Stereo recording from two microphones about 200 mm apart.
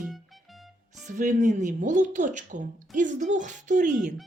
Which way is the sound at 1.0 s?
40° right (ahead or behind).